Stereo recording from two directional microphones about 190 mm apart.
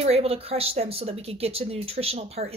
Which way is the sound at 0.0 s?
30° right (ahead or behind).